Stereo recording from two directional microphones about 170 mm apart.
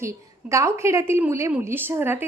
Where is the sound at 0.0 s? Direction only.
15° right (ahead or behind).